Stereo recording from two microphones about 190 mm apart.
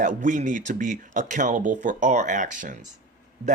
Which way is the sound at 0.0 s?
45° right (ahead or behind).